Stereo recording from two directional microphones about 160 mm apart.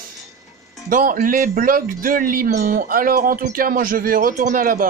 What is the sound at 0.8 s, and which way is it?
Speech, 55° right (ahead or behind).